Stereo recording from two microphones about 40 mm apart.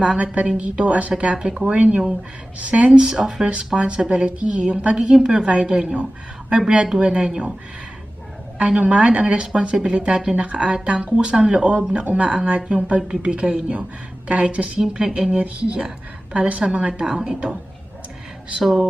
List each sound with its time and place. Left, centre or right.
0.0 s a woman's voice: right
3.1 s speech: centre
3.4 s a woman's voice: right
7.0 s a woman's voice: right
8.5 s a woman's voice: right
18.6 s speech: centre